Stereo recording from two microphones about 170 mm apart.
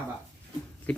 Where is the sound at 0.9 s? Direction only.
5° left (ahead or behind).